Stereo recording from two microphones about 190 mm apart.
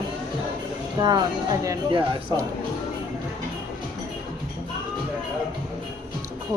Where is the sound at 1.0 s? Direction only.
20° right (ahead or behind).